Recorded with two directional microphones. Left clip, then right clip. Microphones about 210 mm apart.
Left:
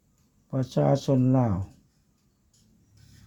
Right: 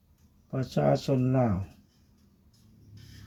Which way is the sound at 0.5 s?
50° left (ahead or behind).